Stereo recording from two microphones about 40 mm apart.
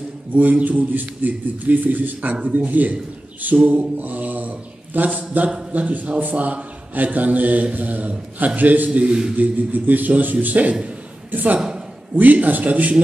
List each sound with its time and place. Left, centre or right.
0.3 s a man's voice: right